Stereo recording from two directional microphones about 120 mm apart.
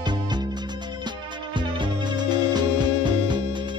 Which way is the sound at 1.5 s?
40° right (ahead or behind).